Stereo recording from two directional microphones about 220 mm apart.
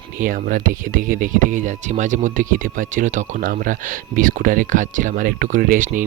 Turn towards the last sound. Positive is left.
turn(degrees=-35)  # may be behind; listen again after turning